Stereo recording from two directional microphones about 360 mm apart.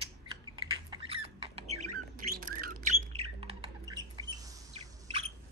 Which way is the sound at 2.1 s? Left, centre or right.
Right.